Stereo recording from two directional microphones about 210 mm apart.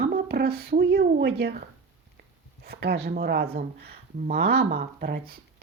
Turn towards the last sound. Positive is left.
turn(degrees=-45)  # may be behind; listen again after turning